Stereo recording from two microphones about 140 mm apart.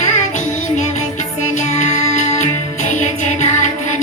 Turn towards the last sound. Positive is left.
turn(degrees=60)  # may be behind; listen again after turning